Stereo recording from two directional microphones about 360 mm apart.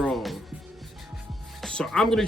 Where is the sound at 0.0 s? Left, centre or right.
Centre.